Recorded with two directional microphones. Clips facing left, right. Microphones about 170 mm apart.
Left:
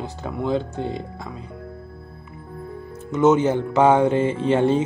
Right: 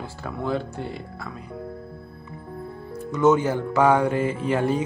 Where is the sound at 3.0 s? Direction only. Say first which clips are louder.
Left 2 dB; 20° left (ahead or behind).